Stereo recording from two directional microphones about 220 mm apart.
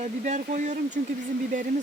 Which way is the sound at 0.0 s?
30° right (ahead or behind).